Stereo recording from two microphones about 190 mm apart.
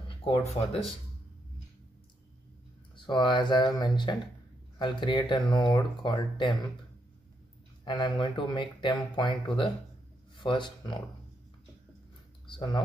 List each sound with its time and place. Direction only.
0.2 s speech: 30° left (ahead or behind)
3.1 s speech: 25° left (ahead or behind)
7.8 s speech: 25° left (ahead or behind)
12.4 s speech: 25° left (ahead or behind)